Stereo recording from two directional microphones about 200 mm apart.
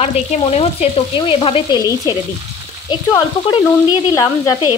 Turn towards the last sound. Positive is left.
turn(degrees=20)  # may be behind; listen again after turning